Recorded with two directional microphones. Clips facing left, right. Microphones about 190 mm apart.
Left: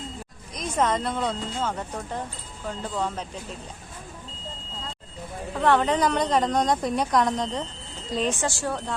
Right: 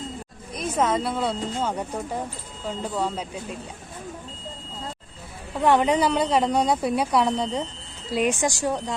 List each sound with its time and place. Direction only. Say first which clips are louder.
0.5 s a woman's voice: right 1 dB; 5° right (ahead or behind)
5.5 s a woman's voice: right 2 dB; 10° right (ahead or behind)